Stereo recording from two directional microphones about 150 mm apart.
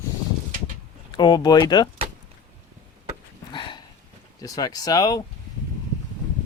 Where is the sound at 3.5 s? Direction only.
30° left (ahead or behind).